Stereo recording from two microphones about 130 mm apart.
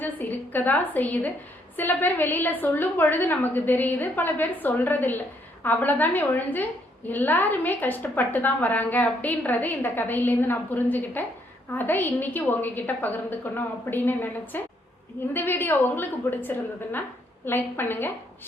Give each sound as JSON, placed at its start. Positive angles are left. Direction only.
{"t": 0.0, "sound": "a woman's voice", "side_deg": 15}